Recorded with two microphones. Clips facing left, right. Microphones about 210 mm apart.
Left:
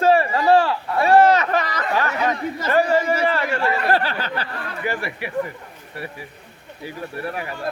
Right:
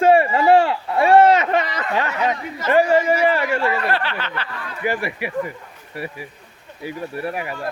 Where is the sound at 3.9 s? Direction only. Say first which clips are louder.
Left 3 dB; 40° left (ahead or behind).